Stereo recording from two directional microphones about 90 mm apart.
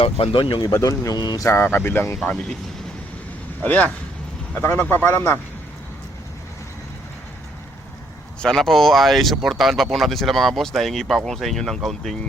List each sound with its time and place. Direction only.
0.0 s speech: 90° left; by 0.6 s 75° left (ahead or behind)
0.7 s speech: 35° left (ahead or behind)
1.4 s speech: 25° left (ahead or behind)
3.6 s speech: 20° left (ahead or behind)
8.4 s speech: 5° left (ahead or behind)